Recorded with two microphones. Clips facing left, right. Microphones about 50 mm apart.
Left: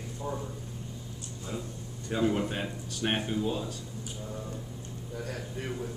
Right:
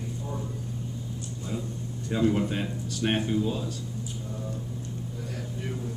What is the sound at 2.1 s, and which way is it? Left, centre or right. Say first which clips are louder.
Speech: right 3 dB; centre.